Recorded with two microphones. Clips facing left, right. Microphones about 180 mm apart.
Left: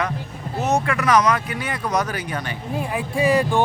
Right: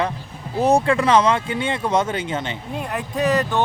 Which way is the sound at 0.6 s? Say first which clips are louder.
Right 5 dB; 30° right (ahead or behind).